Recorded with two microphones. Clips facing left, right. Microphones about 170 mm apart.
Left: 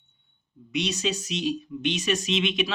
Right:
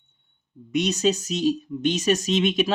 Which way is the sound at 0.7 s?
45° right (ahead or behind).